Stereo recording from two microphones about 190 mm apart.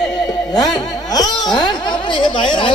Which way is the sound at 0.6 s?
20° left (ahead or behind).